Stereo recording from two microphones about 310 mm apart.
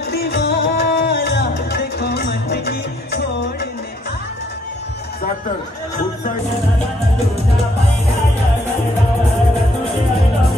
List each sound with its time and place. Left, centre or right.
0.1 s music: left